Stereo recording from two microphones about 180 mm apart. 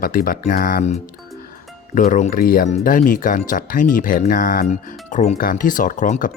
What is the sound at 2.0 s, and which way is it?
Speech, 45° left (ahead or behind).